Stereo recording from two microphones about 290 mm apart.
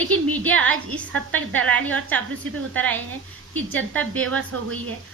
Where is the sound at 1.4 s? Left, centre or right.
Right.